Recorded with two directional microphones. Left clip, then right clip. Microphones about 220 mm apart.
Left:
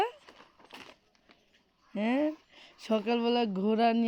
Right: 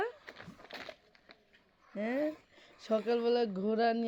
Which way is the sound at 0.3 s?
20° right (ahead or behind).